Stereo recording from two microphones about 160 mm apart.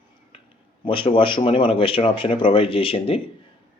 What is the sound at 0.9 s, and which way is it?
Speech, 35° left (ahead or behind).